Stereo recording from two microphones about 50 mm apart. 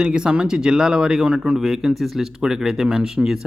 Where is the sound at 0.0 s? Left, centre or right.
Centre.